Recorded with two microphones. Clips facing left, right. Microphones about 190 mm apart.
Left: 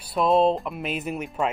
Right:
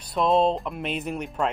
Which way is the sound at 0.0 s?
5° left (ahead or behind).